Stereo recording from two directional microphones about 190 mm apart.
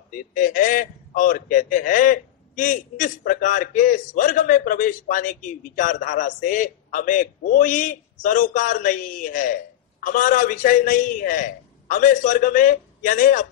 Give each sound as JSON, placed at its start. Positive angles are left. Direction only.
{"t": 0.1, "sound": "a man's voice", "side_deg": 45}